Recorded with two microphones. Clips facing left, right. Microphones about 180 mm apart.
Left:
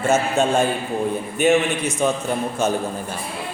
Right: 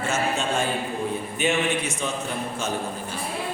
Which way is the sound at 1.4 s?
45° left (ahead or behind).